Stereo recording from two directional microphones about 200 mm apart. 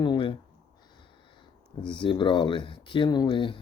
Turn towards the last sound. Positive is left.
turn(degrees=25)  # may be behind; listen again after turning